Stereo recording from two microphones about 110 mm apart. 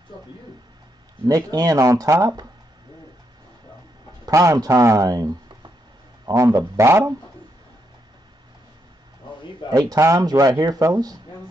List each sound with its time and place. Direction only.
1.2 s speech: 35° right (ahead or behind)
4.3 s speech: 30° right (ahead or behind)
9.7 s speech: 30° right (ahead or behind)